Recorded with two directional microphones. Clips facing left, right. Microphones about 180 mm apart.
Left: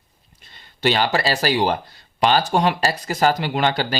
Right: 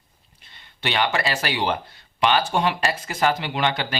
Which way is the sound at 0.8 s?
35° left (ahead or behind).